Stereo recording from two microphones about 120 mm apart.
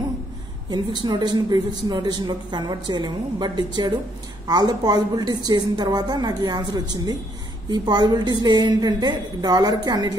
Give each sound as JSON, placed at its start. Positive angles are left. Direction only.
{"t": 0.7, "sound": "a woman's voice", "side_deg": -35}